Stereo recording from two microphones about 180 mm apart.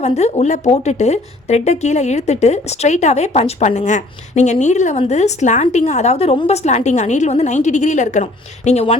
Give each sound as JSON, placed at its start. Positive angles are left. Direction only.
{"t": 0.0, "sound": "speech", "side_deg": 35}